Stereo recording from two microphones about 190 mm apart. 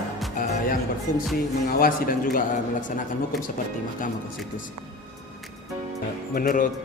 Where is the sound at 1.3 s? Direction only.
50° left (ahead or behind).